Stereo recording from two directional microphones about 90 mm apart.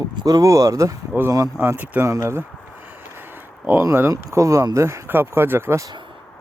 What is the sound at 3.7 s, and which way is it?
Speech, 25° right (ahead or behind).